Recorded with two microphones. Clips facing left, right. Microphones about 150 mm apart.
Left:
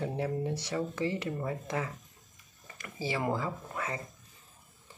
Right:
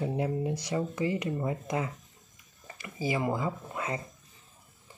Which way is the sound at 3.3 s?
20° right (ahead or behind).